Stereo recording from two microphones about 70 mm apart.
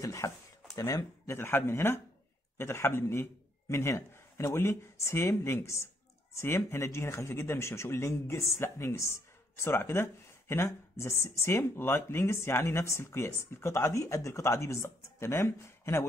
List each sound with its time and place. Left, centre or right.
0.0 s speech: left
1.3 s speech: left